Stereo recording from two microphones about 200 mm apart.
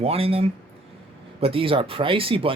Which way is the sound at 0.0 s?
30° right (ahead or behind).